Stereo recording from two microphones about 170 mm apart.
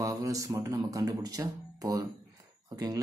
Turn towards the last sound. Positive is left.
turn(degrees=-20)  # may be behind; listen again after turning